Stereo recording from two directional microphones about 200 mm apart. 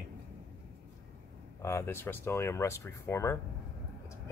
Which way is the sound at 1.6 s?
10° left (ahead or behind).